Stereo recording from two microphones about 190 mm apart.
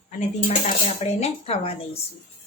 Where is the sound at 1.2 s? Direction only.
30° left (ahead or behind).